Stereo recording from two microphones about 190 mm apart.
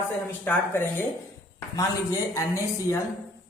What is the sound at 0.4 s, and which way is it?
Speech, 10° left (ahead or behind).